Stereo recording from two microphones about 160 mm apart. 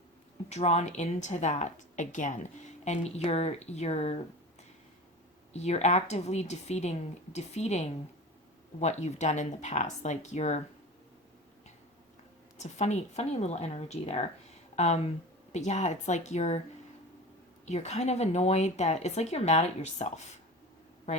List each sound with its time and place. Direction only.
0.5 s speech: 45° left (ahead or behind)
5.5 s speech: 45° left (ahead or behind)
12.5 s speech: 45° left (ahead or behind)
17.7 s speech: 45° left (ahead or behind)